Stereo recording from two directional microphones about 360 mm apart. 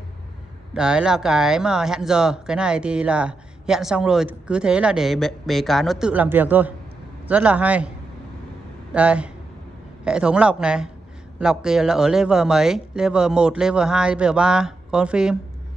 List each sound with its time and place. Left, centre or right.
0.7 s speech: centre
8.9 s speech: centre